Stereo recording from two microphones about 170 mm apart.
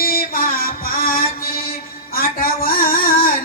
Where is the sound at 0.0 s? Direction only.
60° left (ahead or behind).